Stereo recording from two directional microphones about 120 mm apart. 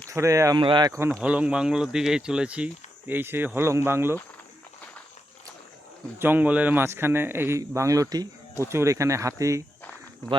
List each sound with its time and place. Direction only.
0.1 s speech: 25° right (ahead or behind)
0.5 s speech: 40° right (ahead or behind)
1.2 s speech: 10° right (ahead or behind)
6.1 s speech: 15° right (ahead or behind)